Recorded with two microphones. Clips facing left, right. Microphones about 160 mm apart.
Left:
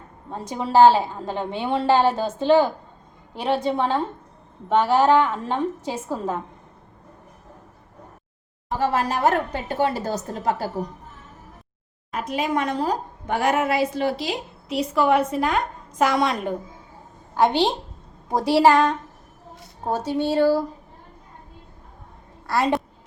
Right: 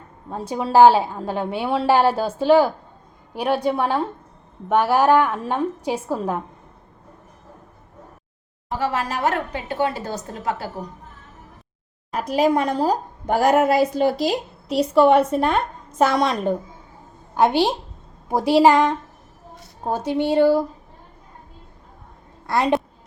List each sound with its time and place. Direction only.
0.3 s a woman's voice: 10° right (ahead or behind)
3.4 s a woman's voice: 25° left (ahead or behind)
3.7 s a woman's voice: 10° right (ahead or behind)
8.8 s a woman's voice: 40° left (ahead or behind)
12.1 s a woman's voice: 35° right (ahead or behind); by 18.9 s 15° right (ahead or behind)
20.1 s a woman's voice: 15° right (ahead or behind)
22.4 s a child's voice: 20° right (ahead or behind)